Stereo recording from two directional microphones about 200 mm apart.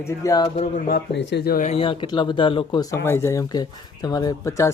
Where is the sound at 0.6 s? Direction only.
50° left (ahead or behind).